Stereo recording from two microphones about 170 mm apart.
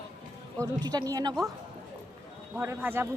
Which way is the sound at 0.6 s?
25° right (ahead or behind).